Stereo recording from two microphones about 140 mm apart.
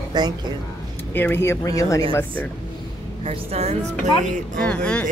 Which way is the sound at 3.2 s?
45° right (ahead or behind).